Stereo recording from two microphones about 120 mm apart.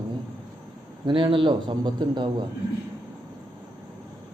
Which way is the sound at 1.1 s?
45° right (ahead or behind).